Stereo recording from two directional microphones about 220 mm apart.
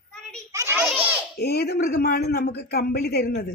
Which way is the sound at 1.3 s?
45° left (ahead or behind).